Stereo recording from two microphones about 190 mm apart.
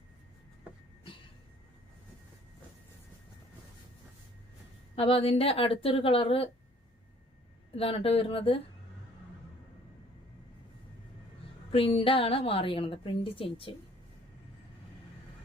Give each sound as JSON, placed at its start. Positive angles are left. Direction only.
{"t": 4.9, "sound": "a woman's voice", "side_deg": 30}
{"t": 7.8, "sound": "a woman's voice", "side_deg": 30}
{"t": 11.7, "sound": "a woman's voice", "side_deg": 30}